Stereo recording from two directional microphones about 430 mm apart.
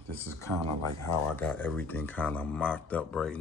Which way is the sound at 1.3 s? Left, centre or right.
Centre.